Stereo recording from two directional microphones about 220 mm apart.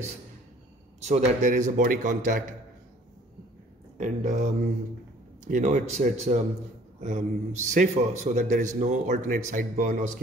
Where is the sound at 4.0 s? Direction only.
35° right (ahead or behind).